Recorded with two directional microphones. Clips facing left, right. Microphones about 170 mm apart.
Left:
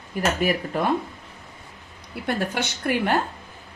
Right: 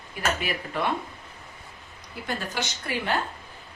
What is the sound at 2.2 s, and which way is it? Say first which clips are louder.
Speech: left 6 dB; 65° left (ahead or behind).